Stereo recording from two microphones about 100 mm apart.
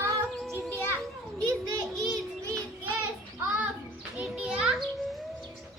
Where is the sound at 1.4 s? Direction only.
35° right (ahead or behind).